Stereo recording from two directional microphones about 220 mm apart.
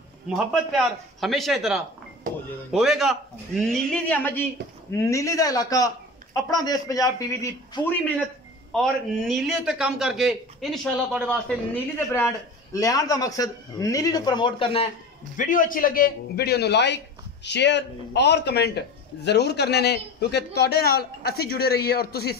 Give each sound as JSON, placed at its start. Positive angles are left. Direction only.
{"t": 0.3, "sound": "a man's voice", "side_deg": 0}
{"t": 9.3, "sound": "a man's voice", "side_deg": 0}
{"t": 15.3, "sound": "a man's voice", "side_deg": 35}